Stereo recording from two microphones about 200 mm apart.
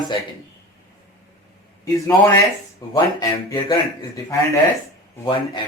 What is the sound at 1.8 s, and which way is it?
A man's voice, 15° left (ahead or behind).